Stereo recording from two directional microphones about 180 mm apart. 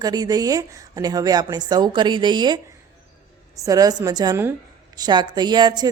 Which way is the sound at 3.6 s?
20° right (ahead or behind).